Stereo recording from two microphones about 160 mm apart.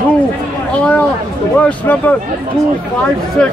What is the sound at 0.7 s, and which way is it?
Speech, 10° left (ahead or behind).